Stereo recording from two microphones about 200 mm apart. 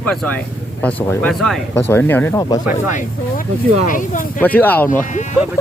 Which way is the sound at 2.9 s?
40° left (ahead or behind).